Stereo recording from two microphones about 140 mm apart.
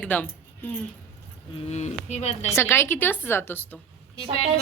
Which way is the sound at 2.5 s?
20° left (ahead or behind).